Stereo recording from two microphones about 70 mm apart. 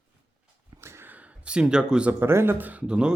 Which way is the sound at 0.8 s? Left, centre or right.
Right.